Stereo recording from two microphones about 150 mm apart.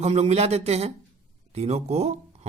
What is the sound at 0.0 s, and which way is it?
Speech, 45° right (ahead or behind).